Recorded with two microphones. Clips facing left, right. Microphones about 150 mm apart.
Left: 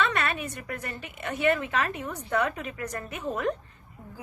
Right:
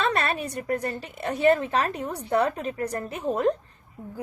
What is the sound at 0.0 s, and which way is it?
A woman's voice, 35° right (ahead or behind).